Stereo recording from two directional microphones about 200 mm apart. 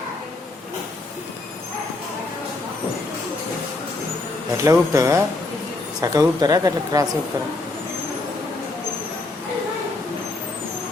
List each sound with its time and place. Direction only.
4.5 s speech: 15° right (ahead or behind)